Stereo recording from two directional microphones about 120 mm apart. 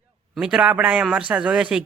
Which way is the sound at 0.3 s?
10° right (ahead or behind).